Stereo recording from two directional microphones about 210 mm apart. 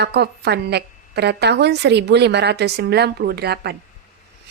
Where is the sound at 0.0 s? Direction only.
50° right (ahead or behind).